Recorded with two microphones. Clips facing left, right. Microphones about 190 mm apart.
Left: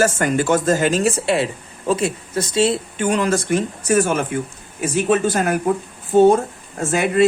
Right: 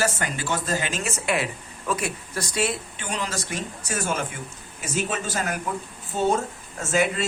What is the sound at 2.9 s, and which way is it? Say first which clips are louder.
Speech: left 12 dB; 50° left (ahead or behind).